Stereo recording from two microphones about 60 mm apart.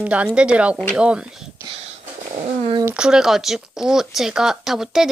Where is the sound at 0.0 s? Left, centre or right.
Right.